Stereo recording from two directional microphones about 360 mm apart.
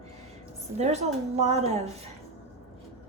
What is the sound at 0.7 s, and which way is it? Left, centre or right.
A woman's voice, centre.